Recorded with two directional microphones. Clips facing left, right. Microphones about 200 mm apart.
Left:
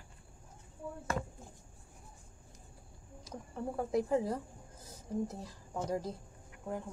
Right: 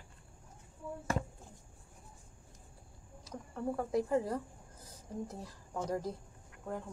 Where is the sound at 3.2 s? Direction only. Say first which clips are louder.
Right 2 dB; 10° left (ahead or behind).